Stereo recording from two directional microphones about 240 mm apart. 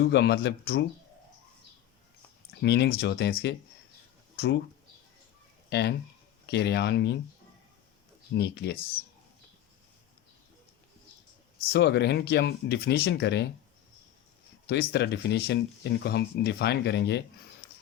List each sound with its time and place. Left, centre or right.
0.0 s speech: left
2.6 s speech: left
6.5 s speech: left
8.3 s speech: left
11.7 s speech: left
14.7 s speech: left